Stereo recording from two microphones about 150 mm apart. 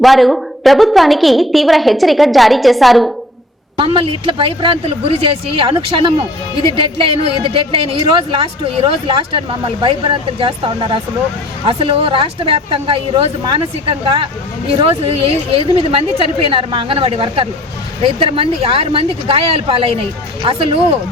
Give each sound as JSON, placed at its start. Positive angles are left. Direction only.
{"t": 0.0, "sound": "a woman's voice", "side_deg": 0}
{"t": 3.8, "sound": "speech", "side_deg": -35}